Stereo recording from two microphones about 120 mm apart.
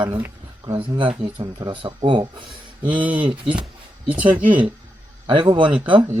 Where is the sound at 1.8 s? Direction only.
45° right (ahead or behind).